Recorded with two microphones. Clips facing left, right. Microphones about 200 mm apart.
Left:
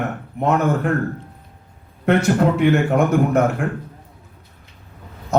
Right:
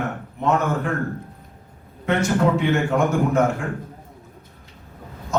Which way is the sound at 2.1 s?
60° left (ahead or behind).